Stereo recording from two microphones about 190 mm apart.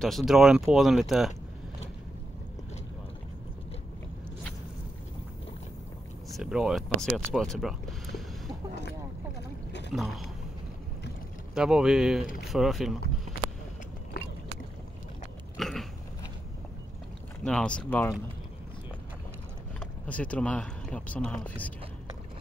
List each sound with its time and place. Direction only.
0.0 s speech: centre (ahead or behind)
6.3 s speech: 5° right (ahead or behind)
9.7 s boat: 65° left (ahead or behind)
9.9 s speech: centre (ahead or behind)
11.5 s speech: 5° right (ahead or behind)
15.5 s biting: centre (ahead or behind)
17.5 s speech: 5° left (ahead or behind)
19.8 s speech: 5° left (ahead or behind)